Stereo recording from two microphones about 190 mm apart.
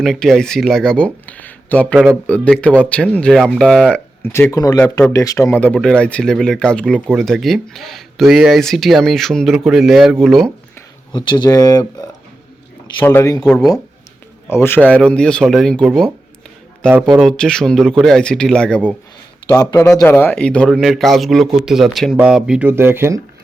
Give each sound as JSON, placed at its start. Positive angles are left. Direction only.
{"t": 0.0, "sound": "speech", "side_deg": 0}
{"t": 4.2, "sound": "speech", "side_deg": 15}
{"t": 11.1, "sound": "speech", "side_deg": 25}
{"t": 13.4, "sound": "speech", "side_deg": 0}
{"t": 14.5, "sound": "speech", "side_deg": 10}
{"t": 15.9, "sound": "speech", "side_deg": -10}
{"t": 17.2, "sound": "speech", "side_deg": 5}
{"t": 19.5, "sound": "speech", "side_deg": 15}